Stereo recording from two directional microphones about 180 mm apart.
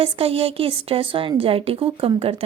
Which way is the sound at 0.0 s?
30° right (ahead or behind).